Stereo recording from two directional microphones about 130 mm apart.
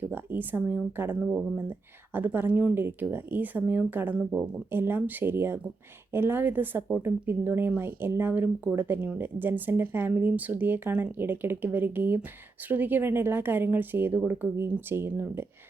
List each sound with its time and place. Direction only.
0.1 s speech: 15° right (ahead or behind)